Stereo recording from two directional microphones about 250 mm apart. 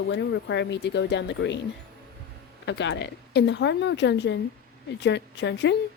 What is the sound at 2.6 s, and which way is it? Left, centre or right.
Speech, left.